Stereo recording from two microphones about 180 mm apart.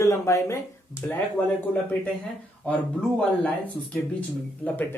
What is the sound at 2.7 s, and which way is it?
Speech, 10° left (ahead or behind).